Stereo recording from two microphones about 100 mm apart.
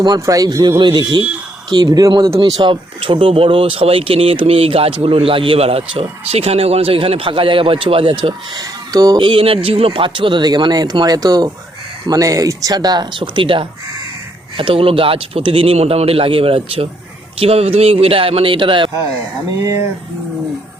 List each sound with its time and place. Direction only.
0.0 s a man's voice: 40° right (ahead or behind)
0.8 s a man's voice: 50° right (ahead or behind)
2.4 s speech: 55° right (ahead or behind)
8.2 s speech: 40° right (ahead or behind); by 16.9 s 75° right (ahead or behind)
17.4 s speech: 85° right; by 18.9 s 60° right (ahead or behind)
19.6 s speech: 30° right (ahead or behind)